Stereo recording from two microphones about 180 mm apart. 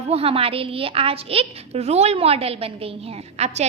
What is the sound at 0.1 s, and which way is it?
A woman's voice, 30° right (ahead or behind).